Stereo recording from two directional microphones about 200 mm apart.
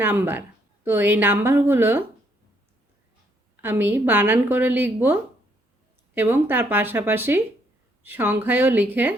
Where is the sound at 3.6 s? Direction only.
10° right (ahead or behind).